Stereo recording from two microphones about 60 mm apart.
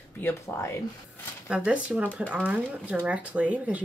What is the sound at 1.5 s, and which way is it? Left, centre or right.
Speech, right.